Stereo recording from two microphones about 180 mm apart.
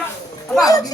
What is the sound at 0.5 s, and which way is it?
Speech, 20° left (ahead or behind).